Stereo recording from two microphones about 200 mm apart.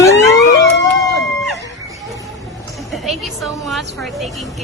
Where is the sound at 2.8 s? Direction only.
Centre (ahead or behind).